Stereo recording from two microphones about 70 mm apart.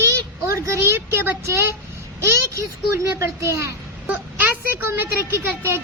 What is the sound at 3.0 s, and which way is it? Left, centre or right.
Speech, right.